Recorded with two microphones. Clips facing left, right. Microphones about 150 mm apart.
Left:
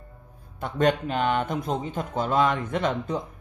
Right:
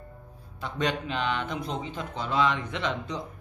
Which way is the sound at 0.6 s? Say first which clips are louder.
Left 6 dB; 50° left (ahead or behind).